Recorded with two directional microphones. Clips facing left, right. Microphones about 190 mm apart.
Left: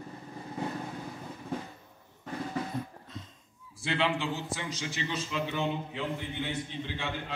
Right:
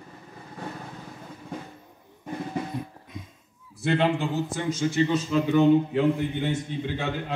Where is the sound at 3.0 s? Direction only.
10° right (ahead or behind).